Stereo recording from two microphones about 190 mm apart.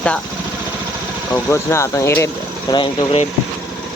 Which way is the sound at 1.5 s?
15° left (ahead or behind).